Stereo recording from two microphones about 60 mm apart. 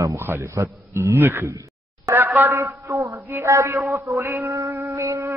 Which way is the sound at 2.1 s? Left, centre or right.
Right.